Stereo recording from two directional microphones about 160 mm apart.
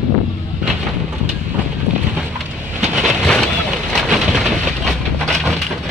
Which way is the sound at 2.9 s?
Centre (ahead or behind).